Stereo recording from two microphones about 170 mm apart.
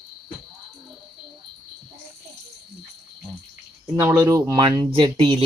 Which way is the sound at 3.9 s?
15° right (ahead or behind).